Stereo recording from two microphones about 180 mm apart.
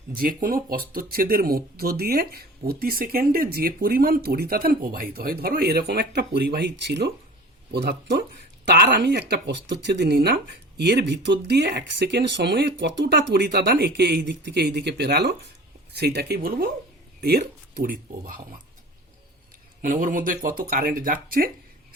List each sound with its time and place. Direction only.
0.1 s speech: 50° right (ahead or behind)
19.8 s speech: 50° right (ahead or behind)